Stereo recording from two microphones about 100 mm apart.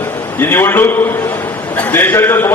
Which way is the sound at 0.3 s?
20° left (ahead or behind).